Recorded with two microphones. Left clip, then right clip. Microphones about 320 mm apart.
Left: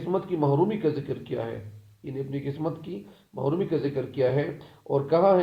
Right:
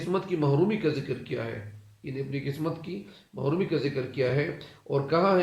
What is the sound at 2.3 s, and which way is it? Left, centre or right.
Speech, left.